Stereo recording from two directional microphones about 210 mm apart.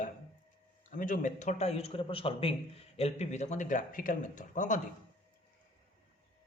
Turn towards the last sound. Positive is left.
turn(degrees=35)  # may be behind; listen again after turning